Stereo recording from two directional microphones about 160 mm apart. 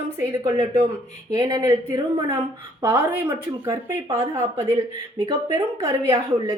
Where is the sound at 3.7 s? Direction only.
20° right (ahead or behind).